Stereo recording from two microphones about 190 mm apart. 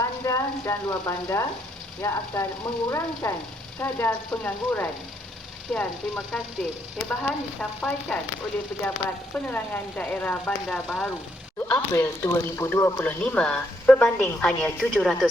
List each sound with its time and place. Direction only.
0.0 s speech: 15° left (ahead or behind); by 15.3 s centre (ahead or behind)